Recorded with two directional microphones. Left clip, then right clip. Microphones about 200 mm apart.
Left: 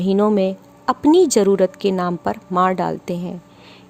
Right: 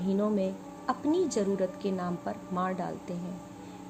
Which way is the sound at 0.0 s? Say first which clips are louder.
Left 13 dB; 55° left (ahead or behind).